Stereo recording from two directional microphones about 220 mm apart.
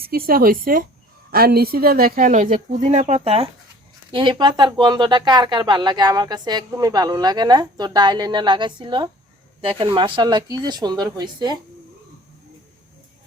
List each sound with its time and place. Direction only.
0.0 s speech: 45° right (ahead or behind); by 11.5 s 20° right (ahead or behind)